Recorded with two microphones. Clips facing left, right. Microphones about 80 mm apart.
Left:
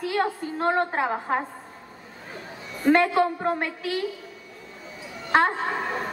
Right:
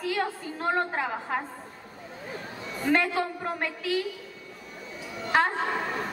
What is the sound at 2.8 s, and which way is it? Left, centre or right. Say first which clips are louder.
A woman's voice: left 6 dB; left.